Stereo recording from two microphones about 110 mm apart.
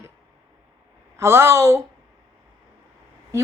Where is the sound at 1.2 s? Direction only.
25° right (ahead or behind).